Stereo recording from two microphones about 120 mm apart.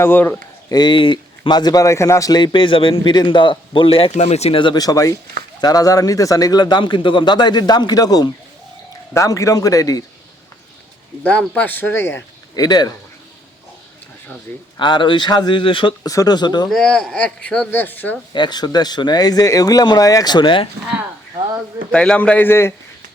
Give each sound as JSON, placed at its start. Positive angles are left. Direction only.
{"t": 0.0, "sound": "speech", "side_deg": 15}
{"t": 0.7, "sound": "speech", "side_deg": 40}
{"t": 4.1, "sound": "a man's voice", "side_deg": 70}
{"t": 11.2, "sound": "speech", "side_deg": 10}
{"t": 12.5, "sound": "speech", "side_deg": 35}
{"t": 14.8, "sound": "speech", "side_deg": 40}
{"t": 16.0, "sound": "speech", "side_deg": 30}
{"t": 16.6, "sound": "speech", "side_deg": 5}
{"t": 18.3, "sound": "speech", "side_deg": 35}
{"t": 21.9, "sound": "speech", "side_deg": 10}